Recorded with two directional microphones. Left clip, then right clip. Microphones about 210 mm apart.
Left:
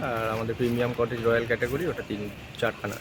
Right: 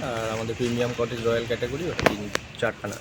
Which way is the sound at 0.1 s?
5° left (ahead or behind).